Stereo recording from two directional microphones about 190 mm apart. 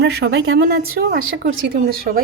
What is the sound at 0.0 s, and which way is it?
A woman's voice, 60° right (ahead or behind).